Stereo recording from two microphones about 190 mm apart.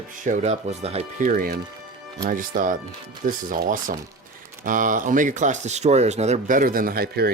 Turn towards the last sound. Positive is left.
turn(degrees=-55)  # may be behind; listen again after turning